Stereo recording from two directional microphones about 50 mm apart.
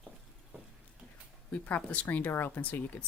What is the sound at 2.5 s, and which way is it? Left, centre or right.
Speech, left.